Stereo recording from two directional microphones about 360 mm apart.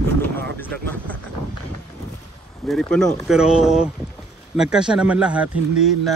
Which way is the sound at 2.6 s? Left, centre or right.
Centre.